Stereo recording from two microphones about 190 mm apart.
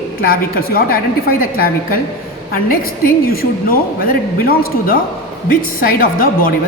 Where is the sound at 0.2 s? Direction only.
50° left (ahead or behind).